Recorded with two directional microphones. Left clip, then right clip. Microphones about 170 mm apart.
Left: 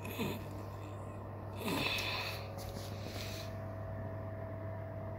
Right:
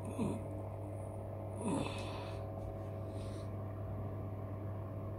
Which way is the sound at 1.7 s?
25° right (ahead or behind).